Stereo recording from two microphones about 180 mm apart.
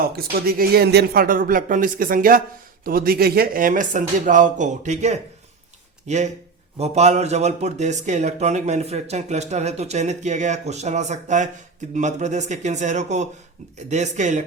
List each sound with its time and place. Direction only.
0.0 s speech: 55° right (ahead or behind); by 14.4 s 40° right (ahead or behind)